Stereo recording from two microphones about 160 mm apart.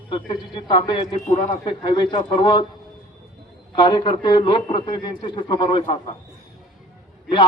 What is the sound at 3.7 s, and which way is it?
A man's voice, 30° left (ahead or behind).